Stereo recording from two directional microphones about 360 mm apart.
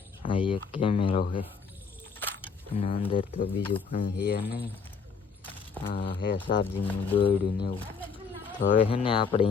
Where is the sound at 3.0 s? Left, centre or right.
Centre.